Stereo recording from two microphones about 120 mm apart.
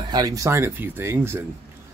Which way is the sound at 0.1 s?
30° right (ahead or behind).